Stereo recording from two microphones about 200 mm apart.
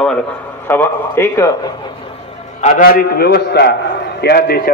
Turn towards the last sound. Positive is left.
turn(degrees=55)  # may be behind; listen again after turning